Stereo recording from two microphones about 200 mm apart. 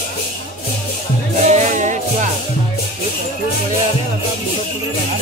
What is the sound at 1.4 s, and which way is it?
Music, 35° right (ahead or behind).